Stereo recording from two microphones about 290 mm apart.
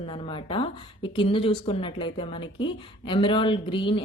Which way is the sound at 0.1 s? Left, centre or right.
Centre.